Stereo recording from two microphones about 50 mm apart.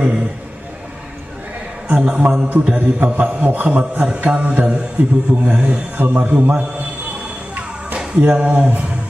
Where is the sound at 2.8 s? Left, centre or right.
Right.